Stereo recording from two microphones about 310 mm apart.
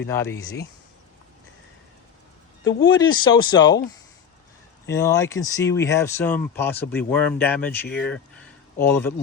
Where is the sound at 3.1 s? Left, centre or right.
Centre.